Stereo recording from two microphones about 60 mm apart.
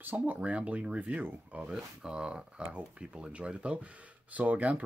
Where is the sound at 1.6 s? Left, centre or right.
Centre; by 4.8 s right.